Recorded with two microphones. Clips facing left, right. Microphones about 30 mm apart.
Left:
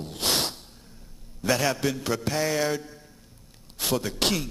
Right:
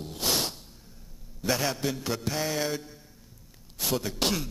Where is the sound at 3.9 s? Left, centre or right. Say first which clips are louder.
Left 3 dB; centre.